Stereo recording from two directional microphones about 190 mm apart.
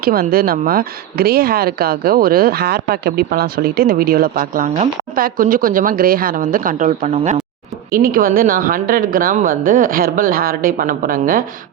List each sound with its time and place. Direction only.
0.0 s speech: 50° right (ahead or behind)